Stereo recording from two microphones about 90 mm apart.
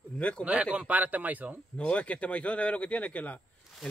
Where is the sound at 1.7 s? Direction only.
15° left (ahead or behind).